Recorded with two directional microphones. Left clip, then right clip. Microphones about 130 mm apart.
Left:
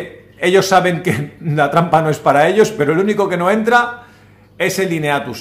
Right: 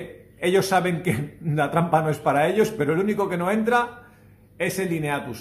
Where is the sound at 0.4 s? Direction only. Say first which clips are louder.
Left 9 dB; 20° left (ahead or behind).